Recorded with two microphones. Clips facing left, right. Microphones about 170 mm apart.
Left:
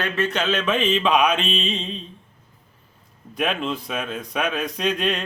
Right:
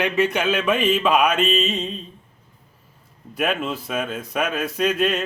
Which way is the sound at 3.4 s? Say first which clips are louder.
Right 1 dB; 5° right (ahead or behind).